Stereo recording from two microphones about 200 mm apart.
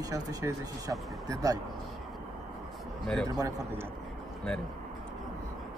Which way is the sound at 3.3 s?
15° right (ahead or behind).